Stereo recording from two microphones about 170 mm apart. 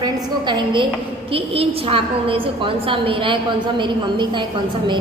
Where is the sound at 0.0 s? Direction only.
25° right (ahead or behind).